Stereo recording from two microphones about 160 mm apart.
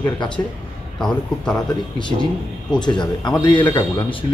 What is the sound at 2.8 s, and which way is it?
Speech, 25° left (ahead or behind).